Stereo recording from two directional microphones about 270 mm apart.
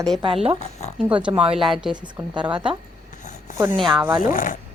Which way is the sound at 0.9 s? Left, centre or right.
Centre.